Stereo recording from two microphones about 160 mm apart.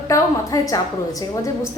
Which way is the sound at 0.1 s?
20° left (ahead or behind).